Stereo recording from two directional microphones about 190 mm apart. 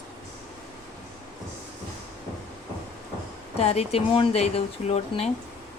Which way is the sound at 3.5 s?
35° left (ahead or behind).